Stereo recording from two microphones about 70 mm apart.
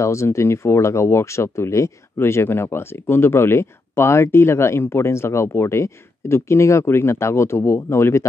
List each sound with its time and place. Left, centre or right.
0.0 s speech: left